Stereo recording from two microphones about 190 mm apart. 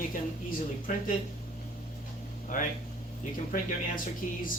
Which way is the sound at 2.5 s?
45° left (ahead or behind).